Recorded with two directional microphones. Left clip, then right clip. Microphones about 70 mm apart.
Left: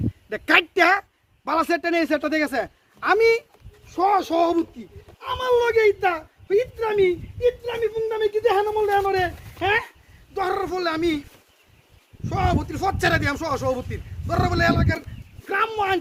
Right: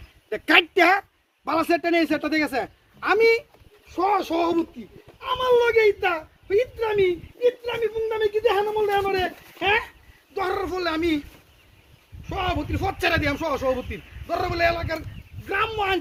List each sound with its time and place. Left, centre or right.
0.3 s a child's voice: left
3.0 s speech: left; by 11.3 s centre
12.3 s a man's voice: left